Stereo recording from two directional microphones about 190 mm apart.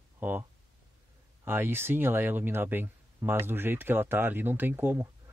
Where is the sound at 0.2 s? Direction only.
10° right (ahead or behind).